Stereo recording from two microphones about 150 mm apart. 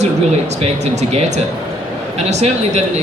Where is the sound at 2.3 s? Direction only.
50° right (ahead or behind).